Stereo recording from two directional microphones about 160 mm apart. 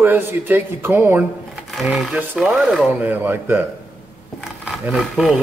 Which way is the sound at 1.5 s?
Centre (ahead or behind).